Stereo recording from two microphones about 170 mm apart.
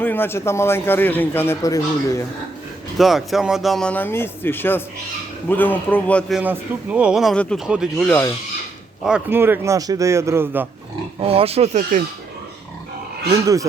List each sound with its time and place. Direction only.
0.0 s a man's voice: 10° left (ahead or behind)
3.0 s a man's voice: centre (ahead or behind)
6.4 s speech: 10° right (ahead or behind)
11.2 s speech: 35° right (ahead or behind)
13.3 s speech: 20° right (ahead or behind)